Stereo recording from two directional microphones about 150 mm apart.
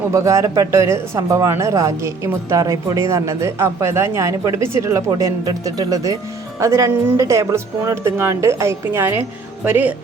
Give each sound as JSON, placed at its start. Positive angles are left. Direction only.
{"t": 0.1, "sound": "speech", "side_deg": -20}